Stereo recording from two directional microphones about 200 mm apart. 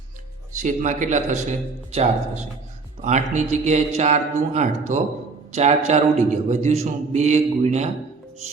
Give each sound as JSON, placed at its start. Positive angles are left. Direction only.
{"t": 0.5, "sound": "a man's voice", "side_deg": -35}